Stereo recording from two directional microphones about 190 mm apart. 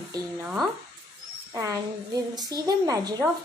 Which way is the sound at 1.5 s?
15° right (ahead or behind).